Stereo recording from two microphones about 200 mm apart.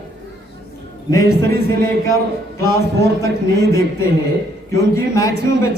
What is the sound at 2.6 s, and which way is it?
Speech, 15° left (ahead or behind).